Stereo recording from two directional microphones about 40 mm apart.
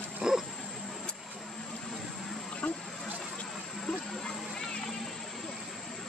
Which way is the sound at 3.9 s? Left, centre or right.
Centre.